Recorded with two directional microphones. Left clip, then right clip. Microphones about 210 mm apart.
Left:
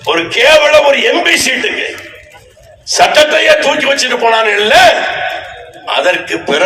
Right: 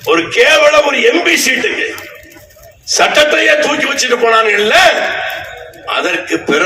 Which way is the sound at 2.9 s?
40° left (ahead or behind).